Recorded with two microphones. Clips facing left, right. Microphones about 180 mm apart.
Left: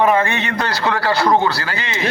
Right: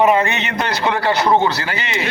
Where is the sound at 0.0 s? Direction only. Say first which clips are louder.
Right 1 dB; 20° right (ahead or behind).